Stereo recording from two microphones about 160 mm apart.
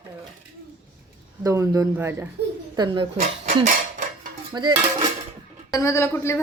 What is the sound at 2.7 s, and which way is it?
Speech, 30° right (ahead or behind).